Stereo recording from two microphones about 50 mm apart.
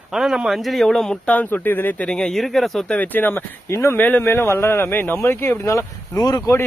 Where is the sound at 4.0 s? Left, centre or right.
Left.